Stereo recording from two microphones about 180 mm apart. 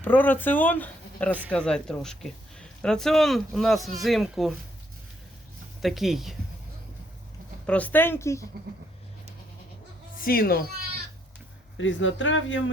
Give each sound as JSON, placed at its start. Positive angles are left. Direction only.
{"t": 0.0, "sound": "speech", "side_deg": 10}
{"t": 5.8, "sound": "speech", "side_deg": 0}
{"t": 7.7, "sound": "speech", "side_deg": 10}
{"t": 10.2, "sound": "speech", "side_deg": 55}
{"t": 11.8, "sound": "speech", "side_deg": 90}